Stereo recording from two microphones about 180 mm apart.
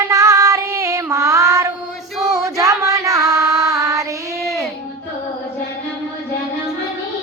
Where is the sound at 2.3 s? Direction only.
20° right (ahead or behind).